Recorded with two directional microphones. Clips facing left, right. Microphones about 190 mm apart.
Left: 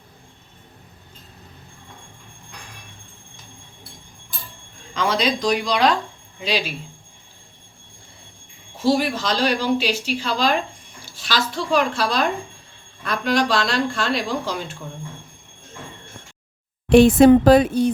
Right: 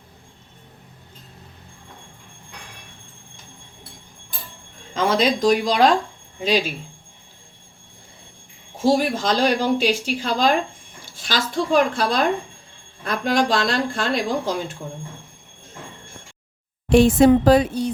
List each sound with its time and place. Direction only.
4.9 s speech: 45° right (ahead or behind)
8.8 s speech: 45° right (ahead or behind)
16.9 s speech: 65° left (ahead or behind)